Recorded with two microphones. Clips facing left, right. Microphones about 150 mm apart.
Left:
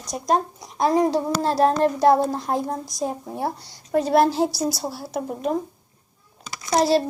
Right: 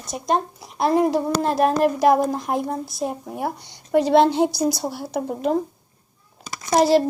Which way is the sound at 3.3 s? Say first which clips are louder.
Even; 15° right (ahead or behind).